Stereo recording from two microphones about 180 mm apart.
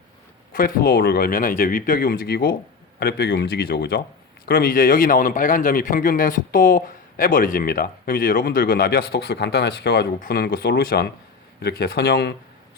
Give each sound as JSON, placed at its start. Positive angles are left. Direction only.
{"t": 0.5, "sound": "a man's voice", "side_deg": 55}